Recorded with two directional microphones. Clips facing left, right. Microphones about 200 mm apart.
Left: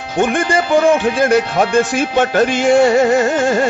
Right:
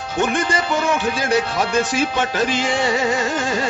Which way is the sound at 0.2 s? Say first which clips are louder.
Left 5 dB; 55° left (ahead or behind).